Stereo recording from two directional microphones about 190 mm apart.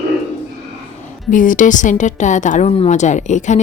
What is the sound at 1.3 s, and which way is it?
A woman's voice, 45° left (ahead or behind).